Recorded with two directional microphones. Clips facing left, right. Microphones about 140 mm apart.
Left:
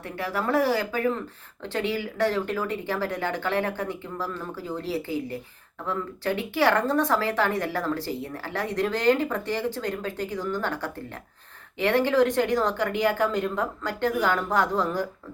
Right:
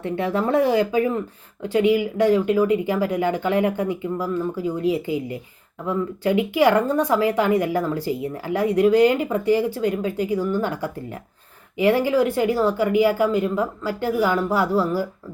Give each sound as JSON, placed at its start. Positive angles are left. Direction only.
{"t": 0.0, "sound": "a woman's voice", "side_deg": -25}